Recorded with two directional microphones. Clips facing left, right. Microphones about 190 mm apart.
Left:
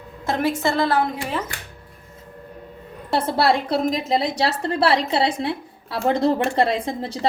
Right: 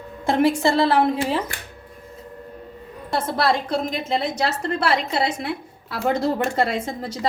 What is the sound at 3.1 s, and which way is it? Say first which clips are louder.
A woman's voice: left 2 dB; 30° left (ahead or behind).